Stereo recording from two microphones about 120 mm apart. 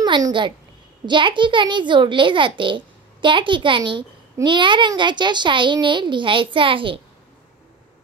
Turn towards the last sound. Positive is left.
turn(degrees=-45)  # may be behind; listen again after turning